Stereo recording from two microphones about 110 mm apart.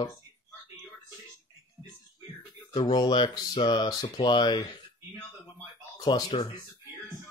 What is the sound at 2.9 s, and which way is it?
Speech, 40° left (ahead or behind).